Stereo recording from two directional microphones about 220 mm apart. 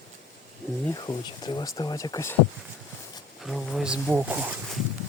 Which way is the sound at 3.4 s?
Centre (ahead or behind).